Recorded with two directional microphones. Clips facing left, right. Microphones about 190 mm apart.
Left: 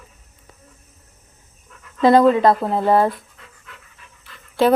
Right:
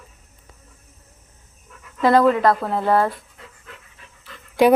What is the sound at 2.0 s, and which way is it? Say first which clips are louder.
Speech: left 3 dB; 20° left (ahead or behind).